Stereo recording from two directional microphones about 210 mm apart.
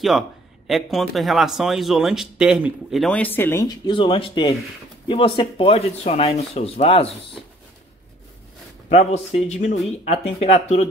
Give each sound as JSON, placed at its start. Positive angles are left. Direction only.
{"t": 0.7, "sound": "speech", "side_deg": 0}
{"t": 8.8, "sound": "speech", "side_deg": 30}